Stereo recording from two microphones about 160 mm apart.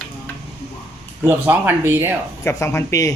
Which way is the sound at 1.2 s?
10° right (ahead or behind).